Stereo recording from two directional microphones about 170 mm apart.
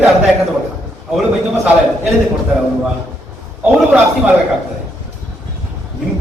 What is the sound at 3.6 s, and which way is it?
Speech, 10° right (ahead or behind).